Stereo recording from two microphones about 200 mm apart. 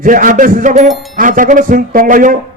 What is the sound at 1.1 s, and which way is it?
A man's voice, 40° right (ahead or behind).